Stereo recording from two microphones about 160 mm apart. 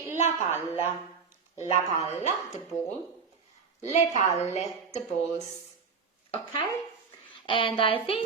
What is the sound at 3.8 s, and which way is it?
A woman's voice, 45° left (ahead or behind).